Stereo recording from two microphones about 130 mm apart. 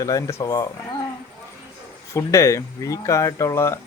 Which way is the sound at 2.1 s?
20° left (ahead or behind).